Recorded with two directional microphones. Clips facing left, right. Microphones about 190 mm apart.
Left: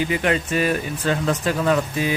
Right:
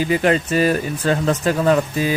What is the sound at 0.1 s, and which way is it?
Speech, 35° right (ahead or behind).